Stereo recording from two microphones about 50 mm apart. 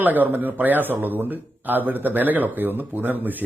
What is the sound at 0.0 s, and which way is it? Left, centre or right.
Speech, right.